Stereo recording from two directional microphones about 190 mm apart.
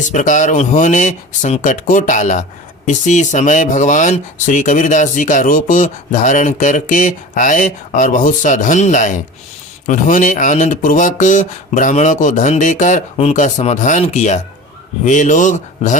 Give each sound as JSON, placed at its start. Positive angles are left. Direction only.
{"t": 0.1, "sound": "speech", "side_deg": 40}